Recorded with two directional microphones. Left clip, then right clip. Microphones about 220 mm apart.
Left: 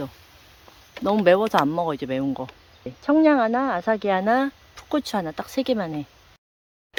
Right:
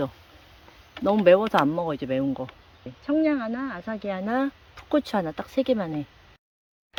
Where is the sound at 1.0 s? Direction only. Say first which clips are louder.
Even; centre (ahead or behind).